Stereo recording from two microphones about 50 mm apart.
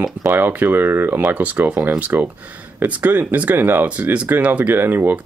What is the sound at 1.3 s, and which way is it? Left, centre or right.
Speech, right.